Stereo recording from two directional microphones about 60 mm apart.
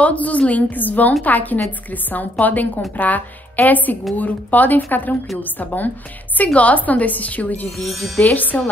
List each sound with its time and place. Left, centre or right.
0.0 s a woman's voice: left